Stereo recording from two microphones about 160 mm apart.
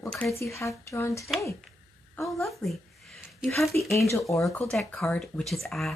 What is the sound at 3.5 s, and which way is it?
Speech, centre (ahead or behind).